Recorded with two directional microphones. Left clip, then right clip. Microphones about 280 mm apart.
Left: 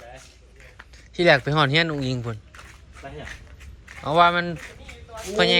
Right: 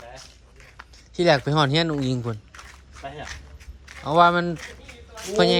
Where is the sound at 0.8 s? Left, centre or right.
Centre.